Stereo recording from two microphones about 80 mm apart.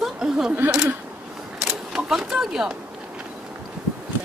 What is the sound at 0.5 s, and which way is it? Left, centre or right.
Speech, right.